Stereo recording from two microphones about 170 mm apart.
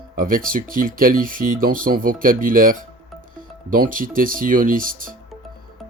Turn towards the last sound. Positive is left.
turn(degrees=-55)  # may be behind; listen again after turning